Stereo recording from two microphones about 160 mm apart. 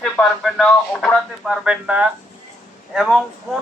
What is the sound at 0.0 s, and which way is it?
Speech, 5° left (ahead or behind).